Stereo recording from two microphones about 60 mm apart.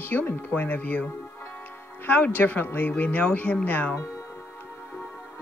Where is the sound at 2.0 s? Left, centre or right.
Left.